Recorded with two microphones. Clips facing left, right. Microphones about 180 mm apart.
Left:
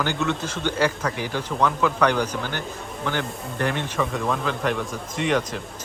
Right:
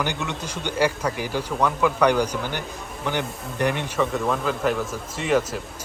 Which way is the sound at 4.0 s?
Centre (ahead or behind).